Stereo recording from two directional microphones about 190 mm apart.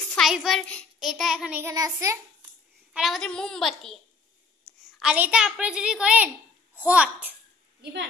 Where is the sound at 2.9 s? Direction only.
Centre (ahead or behind).